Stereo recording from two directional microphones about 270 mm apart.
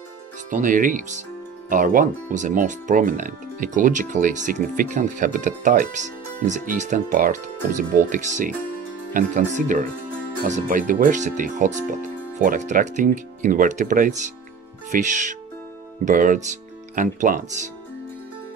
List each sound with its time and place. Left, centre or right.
0.5 s speech: right